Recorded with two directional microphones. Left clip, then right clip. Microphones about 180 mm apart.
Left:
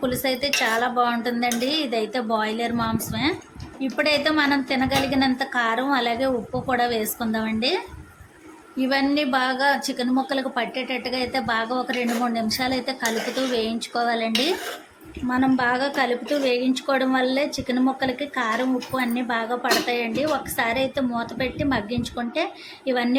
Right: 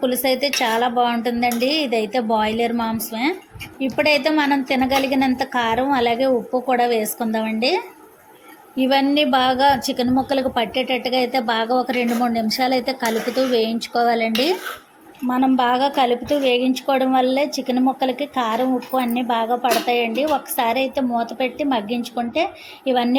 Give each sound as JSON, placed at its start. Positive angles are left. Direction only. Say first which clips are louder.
{"t": 0.0, "sound": "a woman's voice", "louder": "right 5 dB", "side_deg": -15}